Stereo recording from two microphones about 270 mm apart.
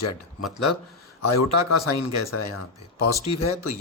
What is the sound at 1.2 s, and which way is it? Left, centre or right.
Speech, left.